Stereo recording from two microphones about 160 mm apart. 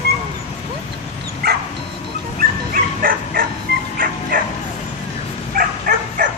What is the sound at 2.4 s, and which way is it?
Dog, 65° right (ahead or behind).